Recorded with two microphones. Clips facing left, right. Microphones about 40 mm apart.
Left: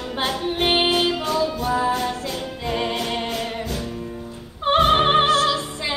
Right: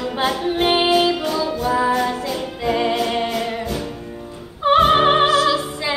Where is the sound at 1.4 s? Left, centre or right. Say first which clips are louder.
Right 3 dB; centre.